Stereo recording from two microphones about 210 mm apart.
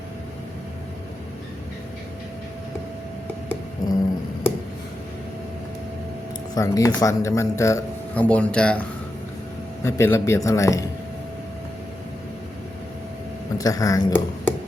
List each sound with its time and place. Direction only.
3.8 s a sound: 20° left (ahead or behind)
6.5 s speech: 15° left (ahead or behind)
9.8 s speech: 15° left (ahead or behind)
13.6 s speech: 15° left (ahead or behind)